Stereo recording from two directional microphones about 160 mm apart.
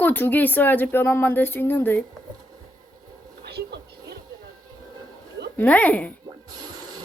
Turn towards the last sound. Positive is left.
turn(degrees=-25)  # may be behind; listen again after turning